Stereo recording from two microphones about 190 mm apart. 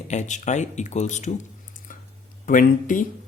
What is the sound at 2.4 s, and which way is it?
Speech, 45° left (ahead or behind).